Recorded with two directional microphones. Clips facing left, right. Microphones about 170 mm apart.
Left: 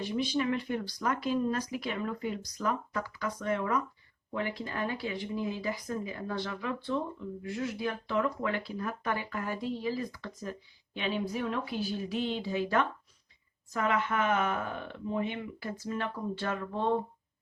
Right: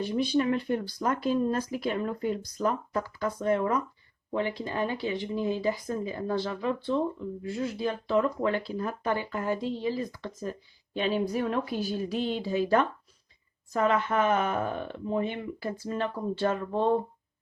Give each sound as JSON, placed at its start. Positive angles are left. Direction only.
{"t": 0.1, "sound": "speech", "side_deg": -35}
{"t": 10.9, "sound": "speech", "side_deg": -40}